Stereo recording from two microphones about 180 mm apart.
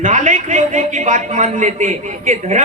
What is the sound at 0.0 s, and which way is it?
A man's voice, 45° right (ahead or behind).